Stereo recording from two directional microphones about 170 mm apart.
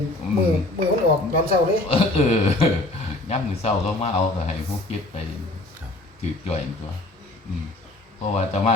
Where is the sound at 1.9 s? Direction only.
35° left (ahead or behind).